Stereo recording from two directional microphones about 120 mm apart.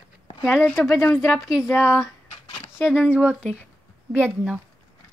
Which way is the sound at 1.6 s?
25° left (ahead or behind).